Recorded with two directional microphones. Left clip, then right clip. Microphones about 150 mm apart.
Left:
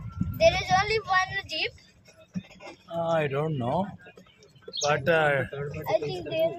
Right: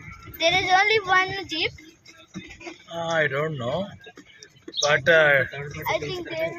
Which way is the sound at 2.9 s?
40° left (ahead or behind).